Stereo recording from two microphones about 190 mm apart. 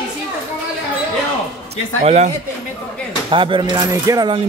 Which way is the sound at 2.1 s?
35° right (ahead or behind).